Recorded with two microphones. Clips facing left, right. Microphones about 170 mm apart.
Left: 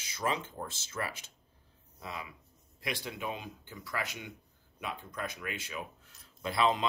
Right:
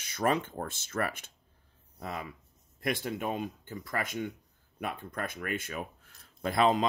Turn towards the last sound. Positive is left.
turn(degrees=-45)  # may be behind; listen again after turning